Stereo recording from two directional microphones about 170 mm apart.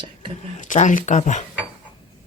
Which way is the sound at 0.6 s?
45° left (ahead or behind).